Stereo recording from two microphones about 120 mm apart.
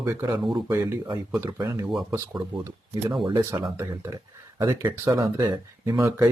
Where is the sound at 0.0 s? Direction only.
30° right (ahead or behind).